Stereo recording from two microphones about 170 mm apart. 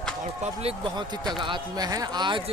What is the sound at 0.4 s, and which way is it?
Speech, 35° right (ahead or behind).